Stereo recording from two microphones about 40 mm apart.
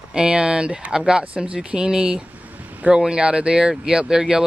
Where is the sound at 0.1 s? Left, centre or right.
Right.